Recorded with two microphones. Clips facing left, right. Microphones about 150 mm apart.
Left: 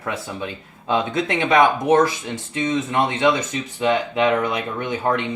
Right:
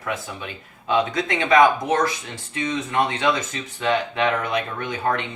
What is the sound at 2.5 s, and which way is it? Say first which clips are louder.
Speech: left 2 dB; 25° left (ahead or behind).